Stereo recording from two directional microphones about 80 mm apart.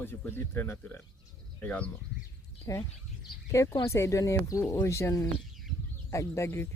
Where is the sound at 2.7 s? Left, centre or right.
Left.